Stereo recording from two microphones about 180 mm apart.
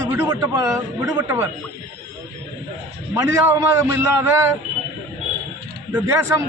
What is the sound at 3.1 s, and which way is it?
A man's voice, 15° right (ahead or behind).